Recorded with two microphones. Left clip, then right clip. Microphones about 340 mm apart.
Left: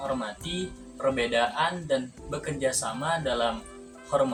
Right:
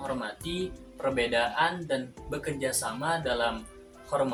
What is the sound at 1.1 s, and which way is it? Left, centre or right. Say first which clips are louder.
Speech: right 1 dB; right.